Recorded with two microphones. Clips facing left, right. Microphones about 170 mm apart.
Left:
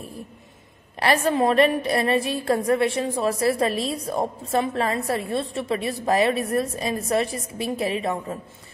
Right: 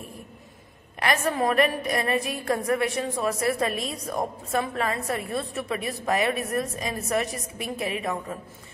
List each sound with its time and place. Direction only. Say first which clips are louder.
0.9 s a woman's voice: left 4 dB; 30° left (ahead or behind)